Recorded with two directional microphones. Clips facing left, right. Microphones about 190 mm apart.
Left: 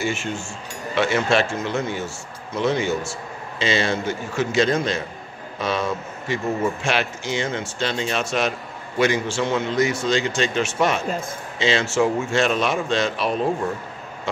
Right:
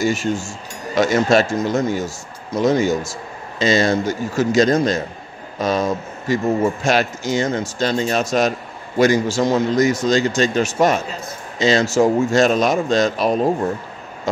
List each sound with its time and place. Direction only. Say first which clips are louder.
0.0 s speech: right 6 dB; 40° right (ahead or behind)